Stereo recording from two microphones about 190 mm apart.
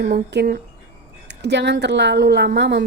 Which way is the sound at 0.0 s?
60° right (ahead or behind).